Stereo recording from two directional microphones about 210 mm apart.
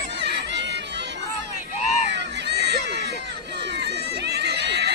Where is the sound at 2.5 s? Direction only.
50° right (ahead or behind).